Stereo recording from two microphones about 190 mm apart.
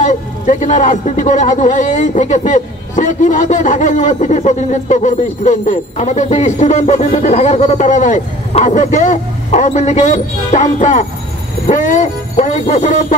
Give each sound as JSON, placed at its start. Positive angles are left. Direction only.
{"t": 0.0, "sound": "speech", "side_deg": 40}